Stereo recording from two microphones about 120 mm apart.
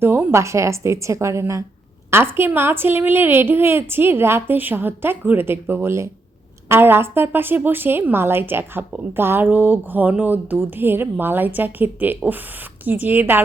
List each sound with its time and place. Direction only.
0.0 s a woman's voice: 20° right (ahead or behind)